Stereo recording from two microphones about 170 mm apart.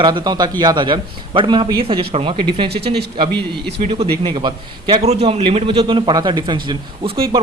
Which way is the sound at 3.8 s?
35° right (ahead or behind).